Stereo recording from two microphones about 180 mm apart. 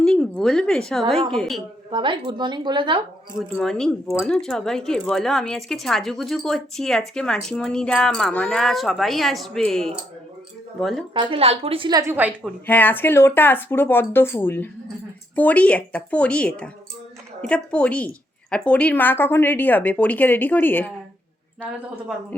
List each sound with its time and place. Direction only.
0.0 s speech: 5° left (ahead or behind)
1.9 s speech: 25° right (ahead or behind)
3.5 s speech: 5° left (ahead or behind)
11.1 s speech: 30° right (ahead or behind)
12.1 s a woman's voice: 10° right (ahead or behind)
12.6 s a woman's voice: 10° left (ahead or behind)